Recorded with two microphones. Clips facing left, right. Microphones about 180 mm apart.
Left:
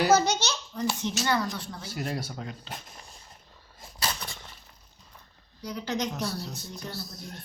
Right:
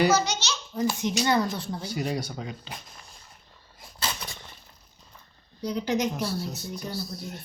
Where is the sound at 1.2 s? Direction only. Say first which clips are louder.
Right 4 dB; 20° right (ahead or behind).